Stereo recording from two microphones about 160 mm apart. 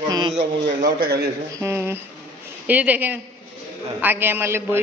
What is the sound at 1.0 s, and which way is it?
Speech, 80° right.